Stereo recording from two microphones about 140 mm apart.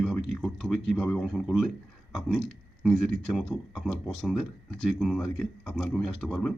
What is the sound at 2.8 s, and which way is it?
Speech, 5° left (ahead or behind).